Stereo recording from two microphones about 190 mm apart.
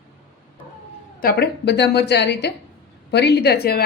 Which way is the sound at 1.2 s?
60° left (ahead or behind).